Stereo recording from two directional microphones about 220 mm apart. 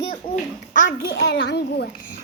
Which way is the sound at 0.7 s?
35° left (ahead or behind).